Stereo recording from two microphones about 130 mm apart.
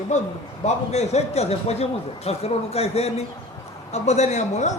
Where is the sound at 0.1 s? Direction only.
65° left (ahead or behind).